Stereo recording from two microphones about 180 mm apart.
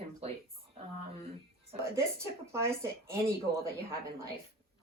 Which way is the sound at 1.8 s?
15° right (ahead or behind).